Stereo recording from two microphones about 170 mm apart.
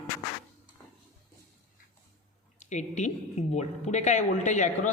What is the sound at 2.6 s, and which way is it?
A woman's voice, 45° left (ahead or behind).